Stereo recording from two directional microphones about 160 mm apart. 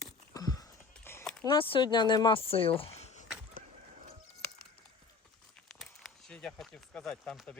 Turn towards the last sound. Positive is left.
turn(degrees=5)  # may be behind; listen again after turning